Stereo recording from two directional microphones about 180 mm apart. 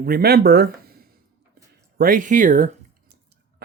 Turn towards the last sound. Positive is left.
turn(degrees=-45)  # may be behind; listen again after turning